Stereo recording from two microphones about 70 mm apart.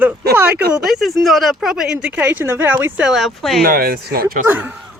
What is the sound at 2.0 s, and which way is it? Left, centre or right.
Speech, right.